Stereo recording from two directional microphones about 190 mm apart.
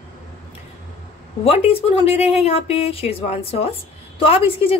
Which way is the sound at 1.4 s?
30° left (ahead or behind).